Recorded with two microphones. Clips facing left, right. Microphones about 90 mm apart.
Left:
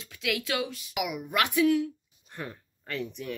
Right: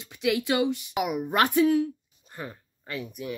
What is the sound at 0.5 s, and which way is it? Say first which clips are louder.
Speech: right 6 dB; 25° right (ahead or behind).